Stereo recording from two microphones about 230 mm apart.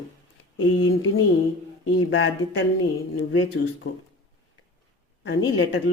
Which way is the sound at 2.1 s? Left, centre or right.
Left.